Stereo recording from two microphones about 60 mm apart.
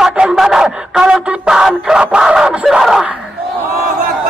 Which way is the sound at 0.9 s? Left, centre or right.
Centre.